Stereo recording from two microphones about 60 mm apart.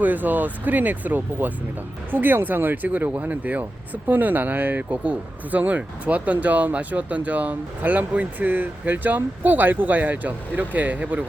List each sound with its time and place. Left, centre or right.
0.0 s speech: right